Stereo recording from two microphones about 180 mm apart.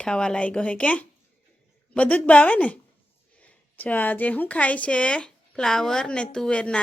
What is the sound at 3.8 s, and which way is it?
A man's voice, 10° left (ahead or behind).